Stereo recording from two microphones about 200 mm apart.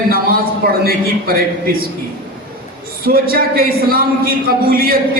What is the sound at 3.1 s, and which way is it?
Speech, 50° right (ahead or behind).